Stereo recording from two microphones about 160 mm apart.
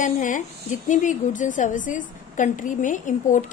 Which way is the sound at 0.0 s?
55° left (ahead or behind).